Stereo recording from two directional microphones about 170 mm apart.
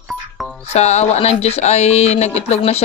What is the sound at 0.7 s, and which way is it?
Speech, 40° left (ahead or behind).